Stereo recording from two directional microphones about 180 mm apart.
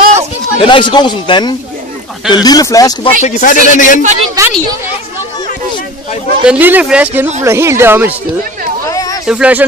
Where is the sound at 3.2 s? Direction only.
45° left (ahead or behind).